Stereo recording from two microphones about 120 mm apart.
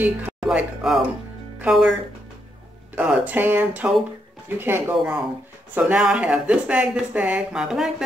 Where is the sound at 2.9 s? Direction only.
15° right (ahead or behind).